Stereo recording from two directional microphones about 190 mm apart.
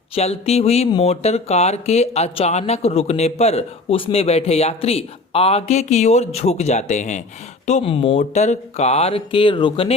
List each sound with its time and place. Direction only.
0.1 s speech: 35° left (ahead or behind)